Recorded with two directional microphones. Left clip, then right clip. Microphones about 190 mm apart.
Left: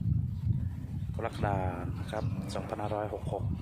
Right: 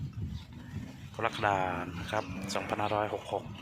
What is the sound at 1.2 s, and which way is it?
Speech, centre (ahead or behind).